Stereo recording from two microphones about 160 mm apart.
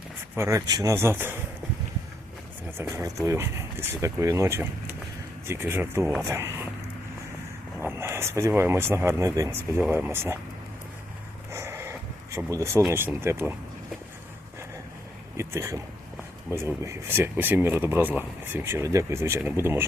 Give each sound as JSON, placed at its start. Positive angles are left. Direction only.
{"t": 0.3, "sound": "speech", "side_deg": -15}
{"t": 3.2, "sound": "speech", "side_deg": -15}
{"t": 7.8, "sound": "speech", "side_deg": -15}
{"t": 11.5, "sound": "a sound", "side_deg": -15}
{"t": 12.8, "sound": "speech", "side_deg": -10}
{"t": 15.4, "sound": "speech", "side_deg": -15}